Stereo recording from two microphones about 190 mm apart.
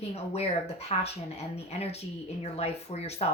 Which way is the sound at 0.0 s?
35° left (ahead or behind).